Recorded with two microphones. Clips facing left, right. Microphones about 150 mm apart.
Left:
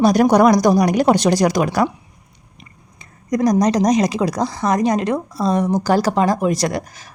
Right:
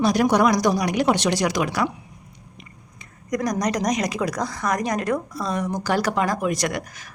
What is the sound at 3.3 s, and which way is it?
A woman's voice, 30° left (ahead or behind).